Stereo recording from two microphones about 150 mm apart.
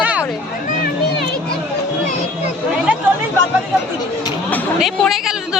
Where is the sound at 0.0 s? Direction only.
10° right (ahead or behind).